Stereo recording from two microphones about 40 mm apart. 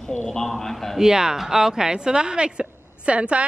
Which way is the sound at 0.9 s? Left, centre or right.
Centre.